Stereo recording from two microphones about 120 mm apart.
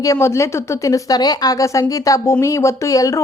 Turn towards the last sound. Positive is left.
turn(degrees=25)  # may be behind; listen again after turning